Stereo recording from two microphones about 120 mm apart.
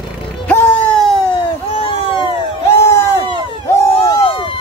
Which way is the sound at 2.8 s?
20° left (ahead or behind).